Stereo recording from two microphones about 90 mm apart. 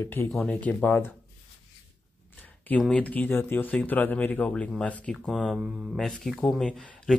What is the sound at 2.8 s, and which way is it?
Speech, 15° left (ahead or behind).